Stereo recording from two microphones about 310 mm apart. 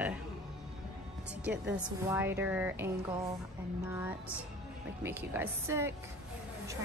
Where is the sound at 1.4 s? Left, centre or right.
Right.